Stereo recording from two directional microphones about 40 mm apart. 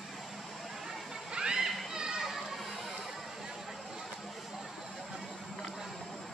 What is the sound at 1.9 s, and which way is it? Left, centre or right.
Children playing, centre.